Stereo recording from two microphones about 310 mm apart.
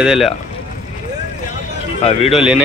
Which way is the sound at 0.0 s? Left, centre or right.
Centre.